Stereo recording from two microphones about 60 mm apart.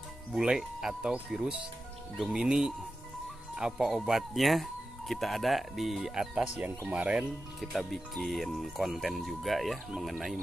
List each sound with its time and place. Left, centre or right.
0.3 s speech: centre
6.9 s speech: centre
7.7 s speech: centre